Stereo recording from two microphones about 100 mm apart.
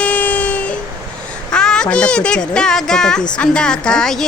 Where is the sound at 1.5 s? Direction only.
10° left (ahead or behind).